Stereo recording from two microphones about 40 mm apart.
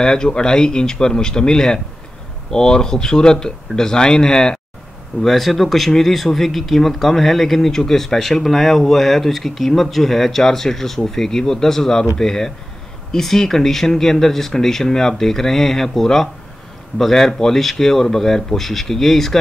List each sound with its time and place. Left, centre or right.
0.0 s a man's voice: left
5.2 s speech: centre